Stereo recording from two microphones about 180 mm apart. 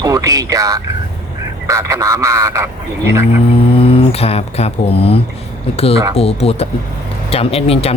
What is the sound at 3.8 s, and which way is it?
Speech, 30° left (ahead or behind).